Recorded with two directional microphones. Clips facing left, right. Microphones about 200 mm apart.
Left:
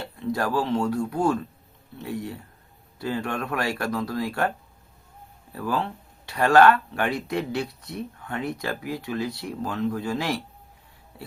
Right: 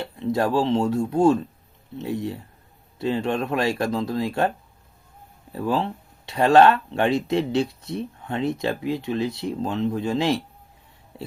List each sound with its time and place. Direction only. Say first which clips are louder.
0.0 s speech: right 4 dB; 20° right (ahead or behind)